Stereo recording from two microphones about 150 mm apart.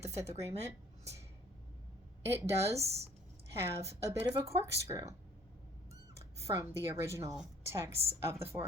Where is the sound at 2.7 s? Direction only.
45° right (ahead or behind).